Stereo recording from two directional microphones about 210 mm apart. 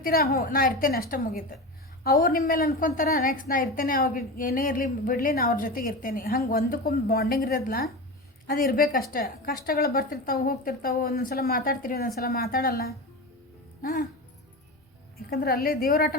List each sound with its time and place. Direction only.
0.0 s a woman's voice: 45° left (ahead or behind)
15.4 s a woman's voice: 45° left (ahead or behind)